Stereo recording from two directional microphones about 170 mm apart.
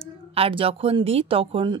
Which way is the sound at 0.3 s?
35° right (ahead or behind).